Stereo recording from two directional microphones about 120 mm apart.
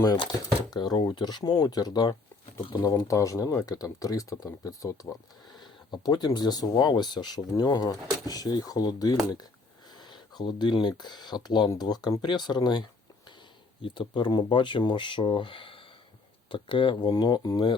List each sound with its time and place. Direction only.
0.7 s speech: 35° left (ahead or behind)
3.1 s speech: 25° left (ahead or behind)
13.8 s speech: 45° left (ahead or behind)